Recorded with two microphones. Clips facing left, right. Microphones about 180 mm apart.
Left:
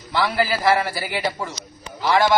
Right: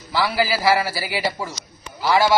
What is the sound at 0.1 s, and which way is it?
A man's voice, centre (ahead or behind).